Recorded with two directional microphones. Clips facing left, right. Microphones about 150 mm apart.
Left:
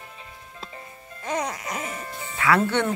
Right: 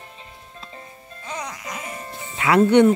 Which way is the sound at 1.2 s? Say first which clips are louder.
Left 4 dB; 50° left (ahead or behind).